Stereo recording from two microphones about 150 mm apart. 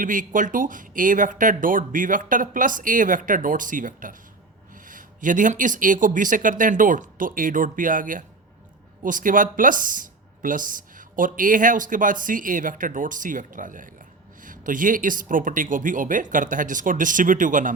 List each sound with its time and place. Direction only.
0.0 s speech: 60° right (ahead or behind)